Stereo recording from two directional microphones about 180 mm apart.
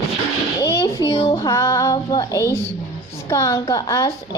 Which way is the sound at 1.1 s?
25° left (ahead or behind).